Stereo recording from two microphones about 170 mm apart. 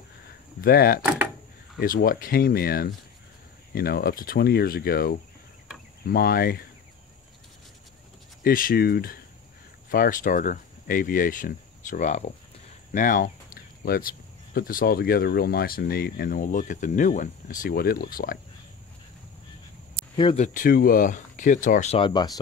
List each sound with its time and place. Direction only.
0.6 s speech: 65° left (ahead or behind)
1.0 s door: 10° right (ahead or behind)
1.8 s speech: 60° left (ahead or behind)
8.5 s speech: 60° left (ahead or behind)
20.3 s speech: 50° left (ahead or behind)
22.0 s speech: 25° left (ahead or behind)